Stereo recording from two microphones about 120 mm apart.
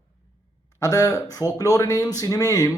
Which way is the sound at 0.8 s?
30° left (ahead or behind).